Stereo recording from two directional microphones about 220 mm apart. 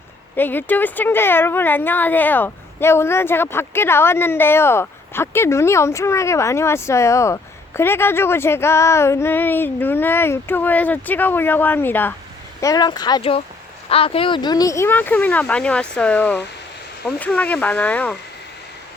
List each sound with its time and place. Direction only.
0.3 s speech: 10° left (ahead or behind)